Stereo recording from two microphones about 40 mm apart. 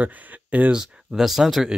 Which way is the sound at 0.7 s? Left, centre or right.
Right.